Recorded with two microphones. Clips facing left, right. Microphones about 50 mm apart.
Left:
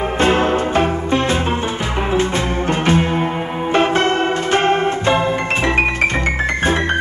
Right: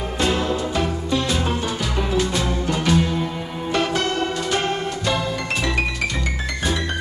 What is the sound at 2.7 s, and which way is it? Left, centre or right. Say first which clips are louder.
Music: left 4 dB; left.